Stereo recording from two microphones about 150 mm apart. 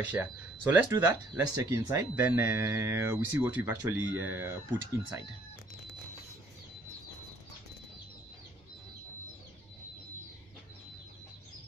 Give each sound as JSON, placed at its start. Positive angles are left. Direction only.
{"t": 0.0, "sound": "speech", "side_deg": -10}